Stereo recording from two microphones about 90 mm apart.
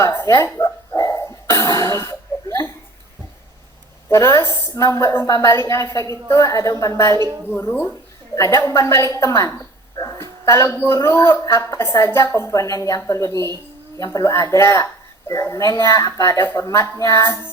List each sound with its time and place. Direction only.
0.0 s dog: 30° left (ahead or behind)
4.1 s a woman's voice: 30° left (ahead or behind)
7.5 s speech: 25° left (ahead or behind)
8.4 s a woman's voice: 35° left (ahead or behind)
10.0 s a sound: 35° left (ahead or behind)
10.9 s a woman's voice: 30° left (ahead or behind)